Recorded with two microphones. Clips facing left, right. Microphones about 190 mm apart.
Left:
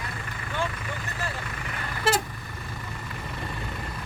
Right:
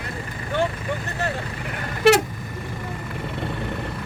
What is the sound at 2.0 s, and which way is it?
Vehicle, 75° right (ahead or behind).